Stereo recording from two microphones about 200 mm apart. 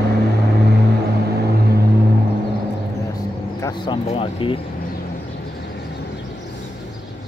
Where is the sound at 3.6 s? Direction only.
20° left (ahead or behind).